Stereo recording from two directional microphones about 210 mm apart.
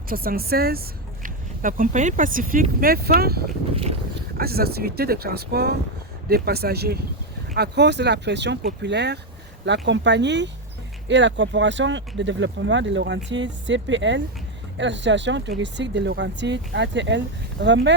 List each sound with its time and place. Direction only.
0.1 s speech: 45° right (ahead or behind)